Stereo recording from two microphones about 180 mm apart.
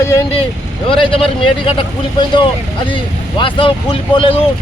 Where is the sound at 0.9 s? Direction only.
30° left (ahead or behind).